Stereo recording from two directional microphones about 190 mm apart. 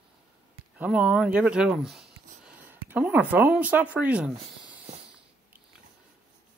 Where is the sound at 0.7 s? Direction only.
5° right (ahead or behind).